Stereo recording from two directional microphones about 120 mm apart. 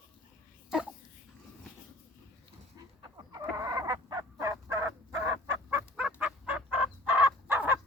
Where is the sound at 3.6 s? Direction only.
30° right (ahead or behind).